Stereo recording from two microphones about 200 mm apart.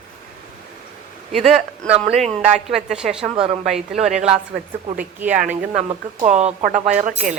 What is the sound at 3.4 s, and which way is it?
Speech, 30° right (ahead or behind).